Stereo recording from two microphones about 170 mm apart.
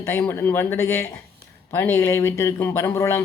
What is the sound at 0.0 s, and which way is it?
Speech, 10° left (ahead or behind).